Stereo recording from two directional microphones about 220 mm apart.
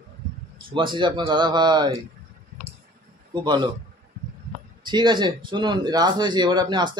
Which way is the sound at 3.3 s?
20° right (ahead or behind).